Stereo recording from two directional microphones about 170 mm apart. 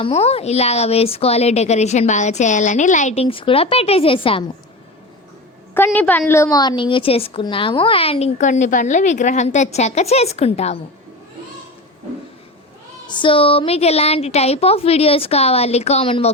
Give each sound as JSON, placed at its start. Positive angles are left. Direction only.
{"t": 0.0, "sound": "a woman's voice", "side_deg": 35}
{"t": 5.7, "sound": "a woman's voice", "side_deg": 10}
{"t": 13.1, "sound": "a woman's voice", "side_deg": 30}